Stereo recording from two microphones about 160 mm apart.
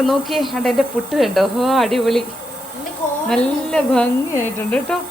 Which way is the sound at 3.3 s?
5° left (ahead or behind).